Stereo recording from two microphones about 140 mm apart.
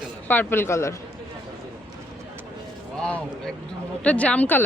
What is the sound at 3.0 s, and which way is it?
A man's voice, 5° left (ahead or behind).